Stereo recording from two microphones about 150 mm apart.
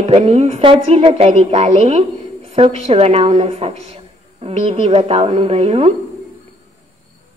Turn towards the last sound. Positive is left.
turn(degrees=-45)  # may be behind; listen again after turning